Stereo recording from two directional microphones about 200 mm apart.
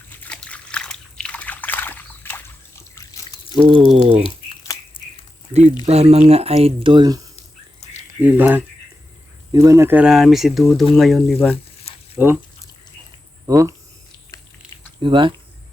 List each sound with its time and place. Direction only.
0.2 s trickle: 5° left (ahead or behind)
2.9 s drip: 15° left (ahead or behind)
3.7 s speech: 30° right (ahead or behind)
4.2 s a sound: 25° left (ahead or behind)
5.8 s speech: 30° right (ahead or behind)
7.8 s a sound: 35° left (ahead or behind)
8.2 s speech: 10° right (ahead or behind)
12.1 s speech: 10° right (ahead or behind)
13.5 s speech: 15° right (ahead or behind)
15.0 s speech: 25° right (ahead or behind)